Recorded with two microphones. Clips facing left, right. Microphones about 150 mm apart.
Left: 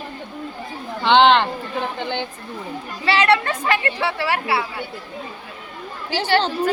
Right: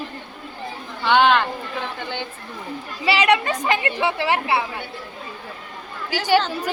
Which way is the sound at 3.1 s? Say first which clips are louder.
Left 1 dB; 15° right (ahead or behind).